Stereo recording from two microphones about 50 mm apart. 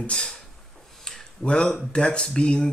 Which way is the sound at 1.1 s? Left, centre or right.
Centre.